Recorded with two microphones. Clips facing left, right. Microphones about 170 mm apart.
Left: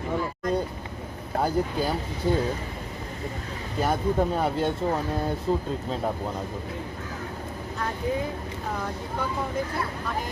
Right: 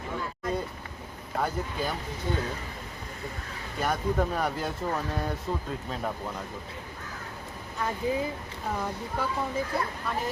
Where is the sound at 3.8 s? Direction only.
25° left (ahead or behind).